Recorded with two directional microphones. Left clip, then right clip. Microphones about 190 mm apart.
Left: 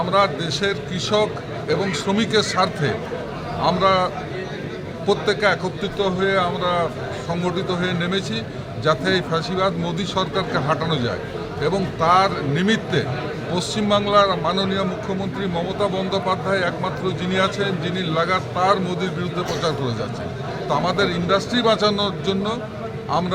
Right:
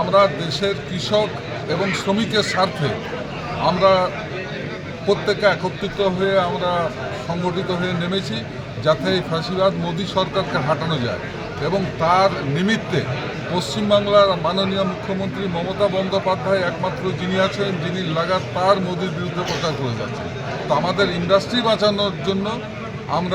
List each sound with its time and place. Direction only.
0.1 s a man's voice: centre (ahead or behind)
20.7 s a man's voice: centre (ahead or behind)